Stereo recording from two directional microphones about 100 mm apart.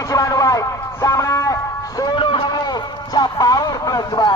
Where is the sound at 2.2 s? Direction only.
55° left (ahead or behind).